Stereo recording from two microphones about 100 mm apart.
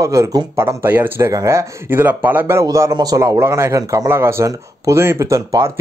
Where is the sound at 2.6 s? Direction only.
35° right (ahead or behind).